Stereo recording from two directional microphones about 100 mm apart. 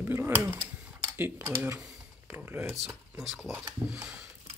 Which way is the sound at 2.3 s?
20° right (ahead or behind).